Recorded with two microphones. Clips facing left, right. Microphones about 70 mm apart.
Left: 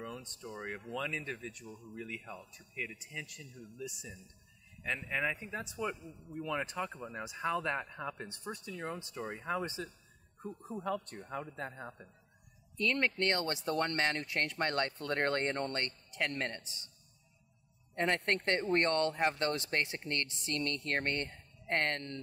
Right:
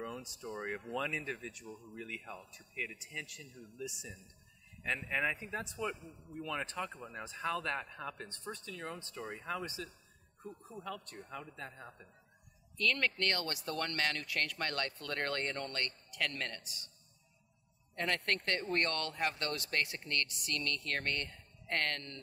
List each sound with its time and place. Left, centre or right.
0.0 s speech: centre; by 16.9 s left
17.9 s speech: left